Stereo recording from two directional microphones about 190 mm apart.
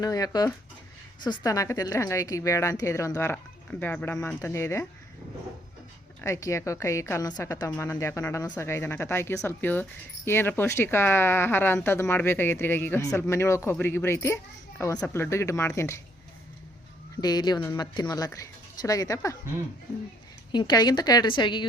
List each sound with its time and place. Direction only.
0.0 s a woman's voice: 20° left (ahead or behind)
6.2 s speech: 15° left (ahead or behind)
17.2 s a woman's voice: 20° left (ahead or behind)
20.5 s a woman's voice: 20° left (ahead or behind)